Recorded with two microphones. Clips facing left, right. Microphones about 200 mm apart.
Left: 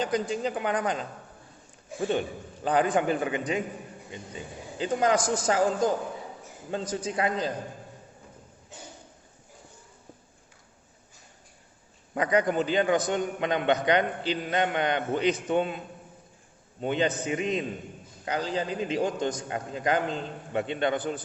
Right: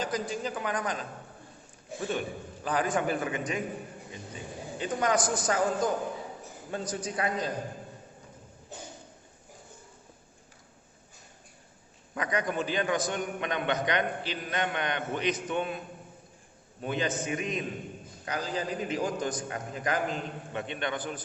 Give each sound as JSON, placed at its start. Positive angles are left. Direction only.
{"t": 0.0, "sound": "a man's voice", "side_deg": 30}
{"t": 4.8, "sound": "a man's voice", "side_deg": 30}
{"t": 12.1, "sound": "a man's voice", "side_deg": 30}
{"t": 16.8, "sound": "a man's voice", "side_deg": 25}